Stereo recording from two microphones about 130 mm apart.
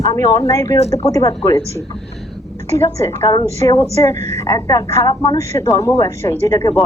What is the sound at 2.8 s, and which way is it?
A woman's voice, 25° left (ahead or behind).